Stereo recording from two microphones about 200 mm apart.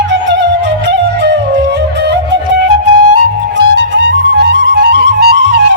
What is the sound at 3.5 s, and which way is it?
Music, 65° right (ahead or behind).